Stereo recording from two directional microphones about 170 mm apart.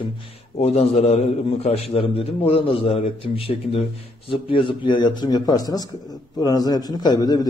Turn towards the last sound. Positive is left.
turn(degrees=25)  # may be behind; listen again after turning